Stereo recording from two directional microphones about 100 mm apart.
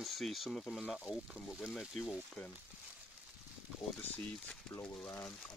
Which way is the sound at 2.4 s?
10° left (ahead or behind).